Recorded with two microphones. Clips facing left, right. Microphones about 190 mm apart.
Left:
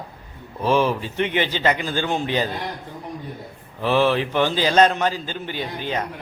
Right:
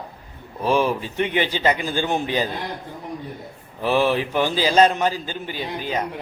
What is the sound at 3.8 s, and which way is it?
A man's voice, 10° right (ahead or behind).